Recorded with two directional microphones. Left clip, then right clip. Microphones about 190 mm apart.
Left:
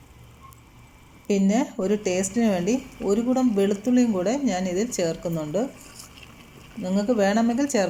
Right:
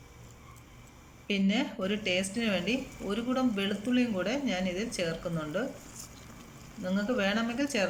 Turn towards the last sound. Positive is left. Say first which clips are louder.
# left 8 dB
turn(degrees=30)  # may be behind; listen again after turning